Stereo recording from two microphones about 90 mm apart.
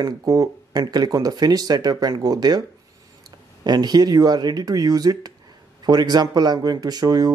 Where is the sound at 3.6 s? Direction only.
50° right (ahead or behind).